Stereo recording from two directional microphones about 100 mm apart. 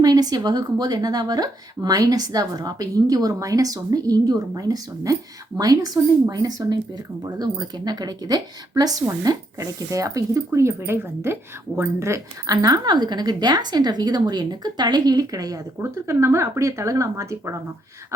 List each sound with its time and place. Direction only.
0.0 s speech: 40° right (ahead or behind)
12.6 s speech: 45° right (ahead or behind)